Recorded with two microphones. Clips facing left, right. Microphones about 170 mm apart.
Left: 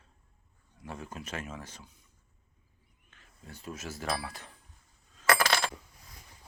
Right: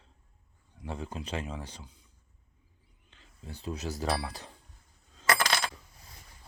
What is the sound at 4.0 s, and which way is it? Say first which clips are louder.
Speech: right 1 dB; 35° right (ahead or behind).